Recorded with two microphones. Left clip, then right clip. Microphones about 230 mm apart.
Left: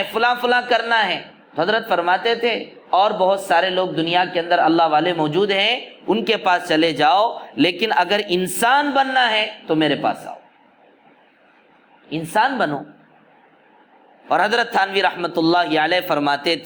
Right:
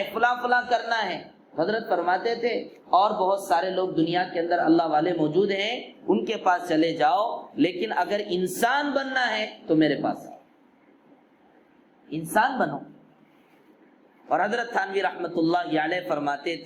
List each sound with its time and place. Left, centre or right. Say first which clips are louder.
0.1 s a man's voice: left 5 dB; left
12.1 s a man's voice: left 5 dB; left
14.3 s a man's voice: left 7 dB; left